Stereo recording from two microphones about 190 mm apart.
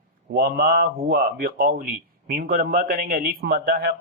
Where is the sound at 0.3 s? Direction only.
50° right (ahead or behind).